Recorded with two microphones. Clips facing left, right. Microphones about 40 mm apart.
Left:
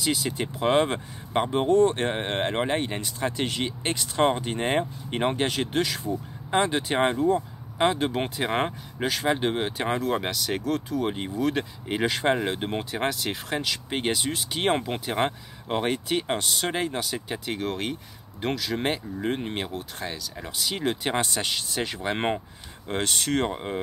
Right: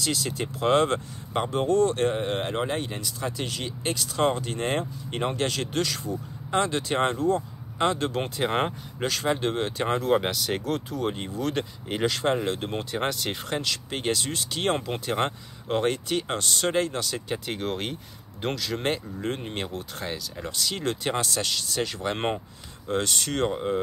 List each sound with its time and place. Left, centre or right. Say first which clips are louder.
0.0 s speech: left 2 dB; centre
8.5 s speech: right 1 dB; centre
9.0 s speech: left 1 dB; centre
11.0 s speech: left 2 dB; centre
12.1 s speech: left 1 dB; left
12.9 s speech: even; centre
17.5 s speech: left 3 dB; centre
22.8 s speech: even; left
23.5 s speech: right 4 dB; centre